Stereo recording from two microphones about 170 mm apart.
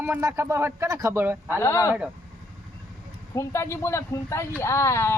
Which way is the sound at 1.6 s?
15° left (ahead or behind).